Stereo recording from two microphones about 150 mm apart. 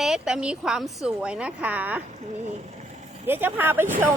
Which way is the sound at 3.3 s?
15° right (ahead or behind).